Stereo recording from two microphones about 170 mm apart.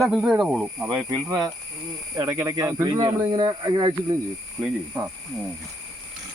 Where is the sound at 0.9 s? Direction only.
25° right (ahead or behind).